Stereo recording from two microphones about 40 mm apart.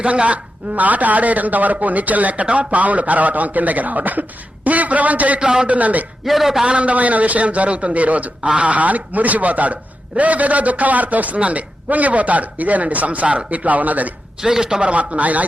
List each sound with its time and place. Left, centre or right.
0.0 s speech: right
5.4 s a man's voice: centre
5.6 s speech: right
6.2 s a man's voice: centre
6.7 s speech: right
14.4 s a man's voice: centre; by 15.4 s right